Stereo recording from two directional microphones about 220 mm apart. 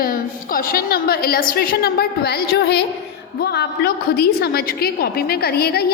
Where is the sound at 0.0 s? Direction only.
40° left (ahead or behind).